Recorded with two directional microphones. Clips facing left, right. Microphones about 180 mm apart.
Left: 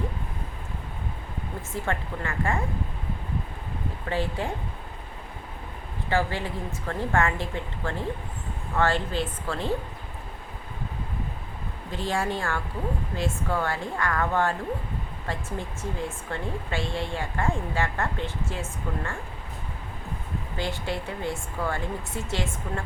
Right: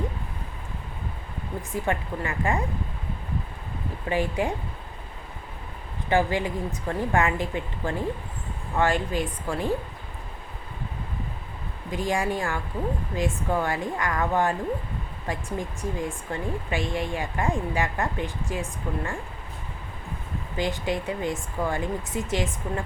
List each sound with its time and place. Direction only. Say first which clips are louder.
1.7 s speech: right 3 dB; 15° right (ahead or behind)
4.1 s speech: right 3 dB; 15° right (ahead or behind)
6.1 s speech: right 4 dB; 15° right (ahead or behind)
11.9 s speech: right 2 dB; 15° right (ahead or behind)
20.6 s speech: right 4 dB; 15° right (ahead or behind)